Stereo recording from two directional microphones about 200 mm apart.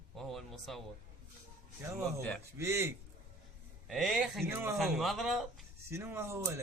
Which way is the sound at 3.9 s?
Centre (ahead or behind).